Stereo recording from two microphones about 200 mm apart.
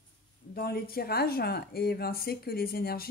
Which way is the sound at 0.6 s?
50° left (ahead or behind).